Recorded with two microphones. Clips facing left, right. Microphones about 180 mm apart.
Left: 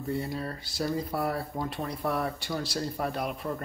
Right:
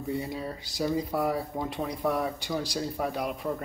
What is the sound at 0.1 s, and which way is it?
Speech, 15° right (ahead or behind).